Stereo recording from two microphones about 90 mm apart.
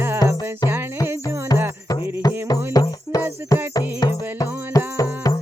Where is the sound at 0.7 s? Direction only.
25° right (ahead or behind).